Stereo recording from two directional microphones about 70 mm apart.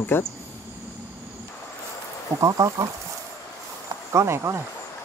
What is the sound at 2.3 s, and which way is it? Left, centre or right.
Speech, right.